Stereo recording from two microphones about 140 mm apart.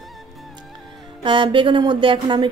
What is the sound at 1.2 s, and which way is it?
Speech, 35° right (ahead or behind).